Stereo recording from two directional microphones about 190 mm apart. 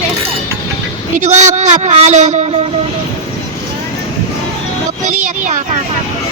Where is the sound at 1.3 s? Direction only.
40° right (ahead or behind).